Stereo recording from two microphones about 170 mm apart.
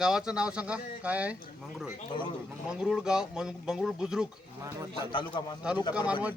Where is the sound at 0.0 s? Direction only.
5° right (ahead or behind).